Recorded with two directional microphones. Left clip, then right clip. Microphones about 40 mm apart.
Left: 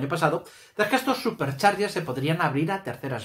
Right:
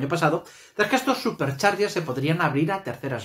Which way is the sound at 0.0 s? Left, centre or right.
Centre.